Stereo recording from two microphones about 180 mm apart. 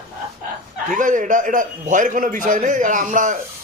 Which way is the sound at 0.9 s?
45° right (ahead or behind).